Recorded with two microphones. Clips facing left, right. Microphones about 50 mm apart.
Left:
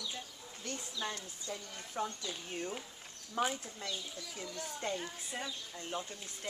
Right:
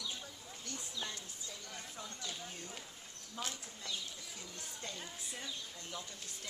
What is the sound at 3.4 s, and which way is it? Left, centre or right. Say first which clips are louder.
Speech: left 10 dB; left.